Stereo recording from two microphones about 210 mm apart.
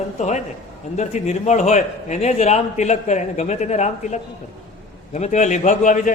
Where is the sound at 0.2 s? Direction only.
35° left (ahead or behind).